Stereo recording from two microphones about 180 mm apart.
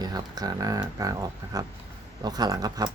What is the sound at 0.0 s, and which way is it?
Speech, 20° right (ahead or behind).